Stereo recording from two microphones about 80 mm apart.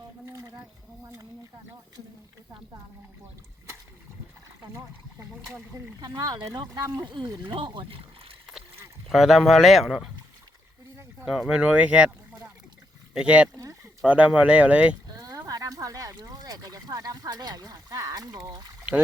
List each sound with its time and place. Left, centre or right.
0.3 s a sound: right
6.0 s speech: right
7.4 s speech: right
9.0 s speech: centre
11.3 s speech: centre
13.1 s speech: centre
15.0 s a sound: right